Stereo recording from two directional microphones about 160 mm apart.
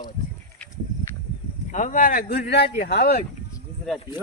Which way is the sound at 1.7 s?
50° left (ahead or behind).